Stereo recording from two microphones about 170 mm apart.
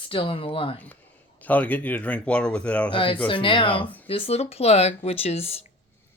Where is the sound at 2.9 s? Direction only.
30° left (ahead or behind).